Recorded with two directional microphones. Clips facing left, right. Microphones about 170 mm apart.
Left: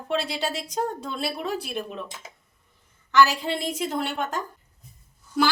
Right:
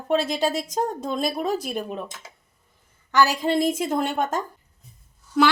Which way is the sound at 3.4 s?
45° right (ahead or behind).